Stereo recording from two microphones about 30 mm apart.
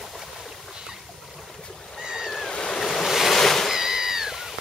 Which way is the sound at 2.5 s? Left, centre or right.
Left.